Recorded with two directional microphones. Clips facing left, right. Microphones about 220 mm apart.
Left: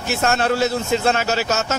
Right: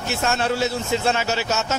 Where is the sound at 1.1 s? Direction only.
45° left (ahead or behind).